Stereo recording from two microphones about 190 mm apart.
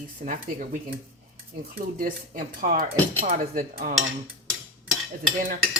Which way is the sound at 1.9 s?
50° right (ahead or behind).